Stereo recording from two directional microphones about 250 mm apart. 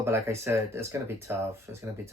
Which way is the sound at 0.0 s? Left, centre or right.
Centre.